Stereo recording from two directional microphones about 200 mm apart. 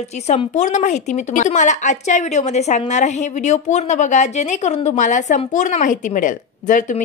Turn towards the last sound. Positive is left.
turn(degrees=40)  # may be behind; listen again after turning